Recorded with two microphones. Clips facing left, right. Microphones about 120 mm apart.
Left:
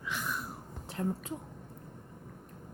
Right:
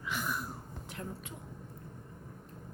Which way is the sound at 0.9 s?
35° left (ahead or behind).